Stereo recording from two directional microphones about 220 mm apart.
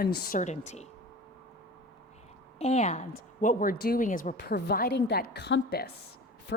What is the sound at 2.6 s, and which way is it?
Speech, 30° left (ahead or behind).